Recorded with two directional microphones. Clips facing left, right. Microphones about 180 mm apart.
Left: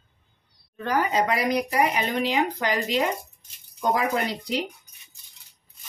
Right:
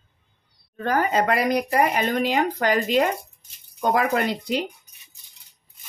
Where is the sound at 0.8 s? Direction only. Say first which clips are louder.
Right 2 dB; 50° right (ahead or behind).